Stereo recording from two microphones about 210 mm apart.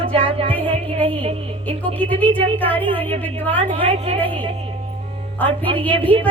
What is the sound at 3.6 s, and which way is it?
Speech, 30° right (ahead or behind).